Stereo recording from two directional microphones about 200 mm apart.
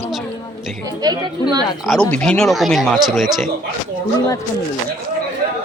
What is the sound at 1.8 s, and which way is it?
Speech, 5° left (ahead or behind).